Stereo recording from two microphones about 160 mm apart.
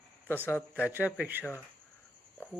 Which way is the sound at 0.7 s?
10° right (ahead or behind).